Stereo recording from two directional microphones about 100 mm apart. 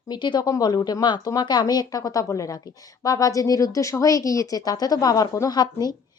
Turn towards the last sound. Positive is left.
turn(degrees=40)  # may be behind; listen again after turning